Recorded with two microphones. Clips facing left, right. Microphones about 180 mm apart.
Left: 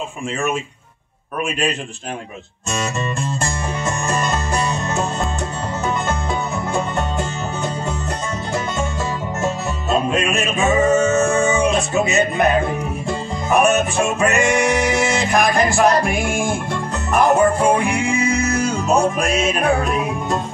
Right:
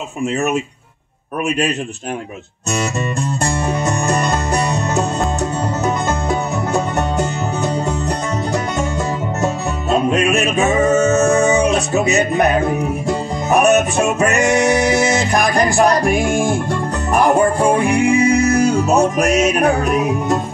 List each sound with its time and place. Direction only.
3.8 s music: 40° right (ahead or behind)
6.7 s music: 40° right (ahead or behind)
10.1 s music: 40° right (ahead or behind)
13.5 s music: 40° right (ahead or behind)